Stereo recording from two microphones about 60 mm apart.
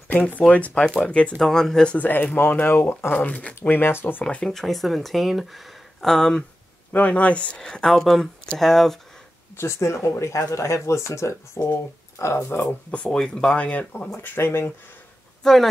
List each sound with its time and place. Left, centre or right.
0.5 s speech: left
1.4 s speech: centre
2.0 s speech: left
3.8 s speech: left
4.2 s speech: centre
4.5 s speech: centre
6.9 s speech: left
7.6 s speech: centre
9.6 s speech: left
12.9 s speech: centre
14.2 s speech: left
15.4 s speech: centre